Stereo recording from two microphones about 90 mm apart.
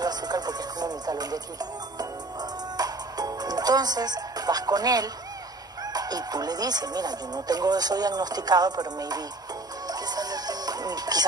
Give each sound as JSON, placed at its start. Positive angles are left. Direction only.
{"t": 0.0, "sound": "music", "side_deg": -50}
{"t": 5.9, "sound": "speech", "side_deg": -45}
{"t": 9.8, "sound": "music", "side_deg": -45}